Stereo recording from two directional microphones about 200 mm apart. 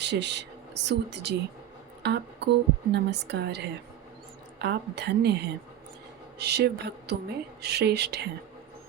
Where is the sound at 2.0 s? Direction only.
55° right (ahead or behind).